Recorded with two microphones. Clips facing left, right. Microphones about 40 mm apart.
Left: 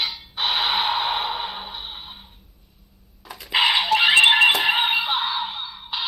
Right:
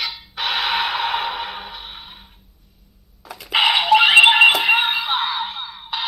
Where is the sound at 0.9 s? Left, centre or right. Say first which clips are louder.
Right 2 dB; right.